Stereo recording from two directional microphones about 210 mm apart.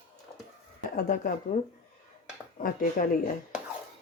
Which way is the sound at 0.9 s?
40° left (ahead or behind).